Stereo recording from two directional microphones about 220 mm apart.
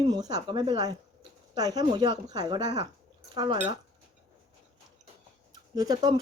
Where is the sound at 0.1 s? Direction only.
15° right (ahead or behind).